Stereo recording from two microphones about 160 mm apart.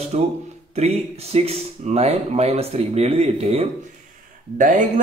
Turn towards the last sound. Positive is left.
turn(degrees=-55)  # may be behind; listen again after turning